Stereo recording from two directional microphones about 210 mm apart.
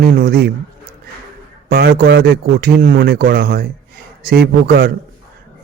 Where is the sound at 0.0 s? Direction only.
45° right (ahead or behind).